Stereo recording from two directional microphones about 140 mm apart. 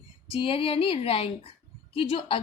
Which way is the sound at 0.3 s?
40° left (ahead or behind).